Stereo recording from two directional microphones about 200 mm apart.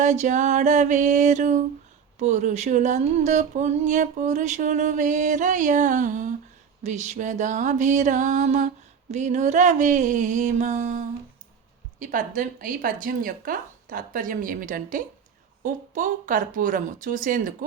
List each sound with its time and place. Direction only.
0.0 s speech: 35° right (ahead or behind)